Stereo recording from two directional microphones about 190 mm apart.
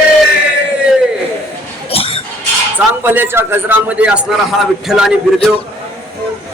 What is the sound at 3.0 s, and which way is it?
A man's voice, 10° right (ahead or behind).